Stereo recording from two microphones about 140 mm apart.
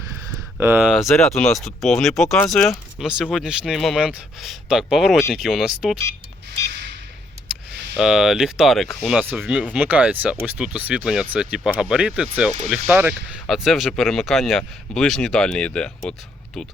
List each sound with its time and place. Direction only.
0.6 s speech: 15° right (ahead or behind)
0.9 s speech: centre (ahead or behind)
7.9 s speech: 5° right (ahead or behind)